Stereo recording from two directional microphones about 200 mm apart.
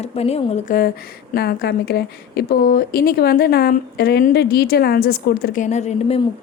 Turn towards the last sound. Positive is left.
turn(degrees=35)  # may be behind; listen again after turning